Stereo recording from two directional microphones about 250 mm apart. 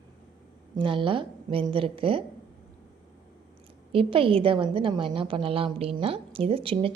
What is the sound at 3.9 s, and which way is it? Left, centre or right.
A woman's voice, right.